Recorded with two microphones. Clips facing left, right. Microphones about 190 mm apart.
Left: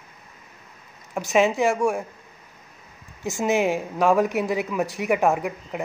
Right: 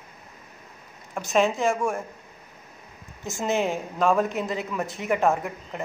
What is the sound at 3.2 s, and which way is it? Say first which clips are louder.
A woman's voice: left 4 dB; 15° left (ahead or behind).